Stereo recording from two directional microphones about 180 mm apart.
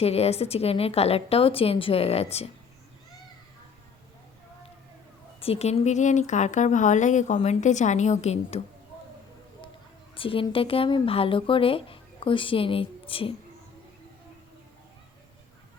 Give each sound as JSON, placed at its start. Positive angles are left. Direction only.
{"t": 0.0, "sound": "speech", "side_deg": 35}
{"t": 5.4, "sound": "speech", "side_deg": 35}
{"t": 10.2, "sound": "speech", "side_deg": 30}